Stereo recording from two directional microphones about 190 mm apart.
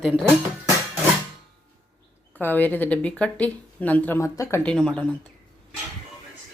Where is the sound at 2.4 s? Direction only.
10° left (ahead or behind).